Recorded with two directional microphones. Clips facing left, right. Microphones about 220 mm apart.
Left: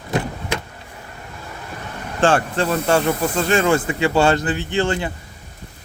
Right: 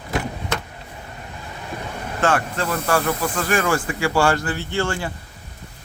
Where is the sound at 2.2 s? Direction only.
30° left (ahead or behind).